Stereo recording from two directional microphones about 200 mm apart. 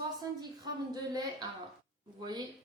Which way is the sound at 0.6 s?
20° right (ahead or behind).